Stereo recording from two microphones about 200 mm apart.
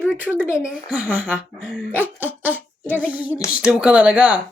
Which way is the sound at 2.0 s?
10° right (ahead or behind).